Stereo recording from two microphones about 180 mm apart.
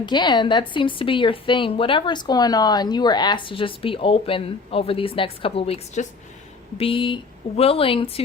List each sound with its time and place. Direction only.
0.0 s a woman's voice: 25° left (ahead or behind)